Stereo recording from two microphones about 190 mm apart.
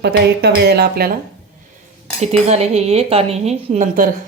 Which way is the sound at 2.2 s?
35° right (ahead or behind).